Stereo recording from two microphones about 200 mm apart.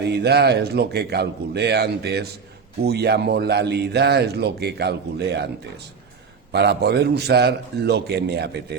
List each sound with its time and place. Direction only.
0.1 s speech: 55° right (ahead or behind)
6.5 s speech: 55° right (ahead or behind)